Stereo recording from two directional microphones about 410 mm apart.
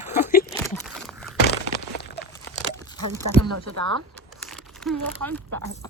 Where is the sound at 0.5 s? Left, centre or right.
Centre.